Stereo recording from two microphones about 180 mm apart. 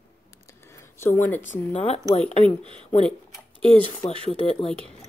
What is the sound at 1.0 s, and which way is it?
Speech, 10° left (ahead or behind).